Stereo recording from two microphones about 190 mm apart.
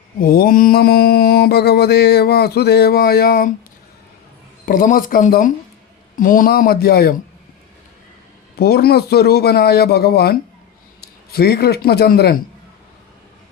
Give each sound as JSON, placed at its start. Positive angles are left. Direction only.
{"t": 0.2, "sound": "mantra", "side_deg": 50}
{"t": 4.6, "sound": "speech", "side_deg": 45}
{"t": 8.5, "sound": "mantra", "side_deg": 55}
{"t": 11.0, "sound": "a man's voice", "side_deg": 55}